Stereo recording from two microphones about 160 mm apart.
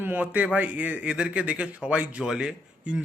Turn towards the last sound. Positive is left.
turn(degrees=-5)  # may be behind; listen again after turning